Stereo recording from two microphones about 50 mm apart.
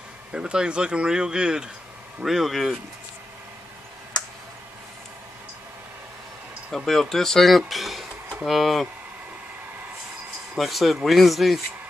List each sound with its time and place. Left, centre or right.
0.3 s speech: centre
2.2 s speech: centre
6.8 s speech: centre
10.6 s speech: centre